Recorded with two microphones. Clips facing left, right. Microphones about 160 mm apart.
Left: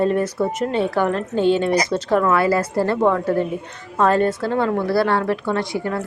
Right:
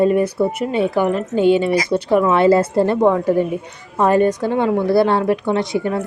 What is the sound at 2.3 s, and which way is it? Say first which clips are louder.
A woman's voice: right 5 dB; 25° right (ahead or behind).